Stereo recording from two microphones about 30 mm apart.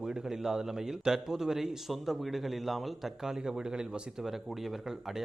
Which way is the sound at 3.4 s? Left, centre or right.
Right.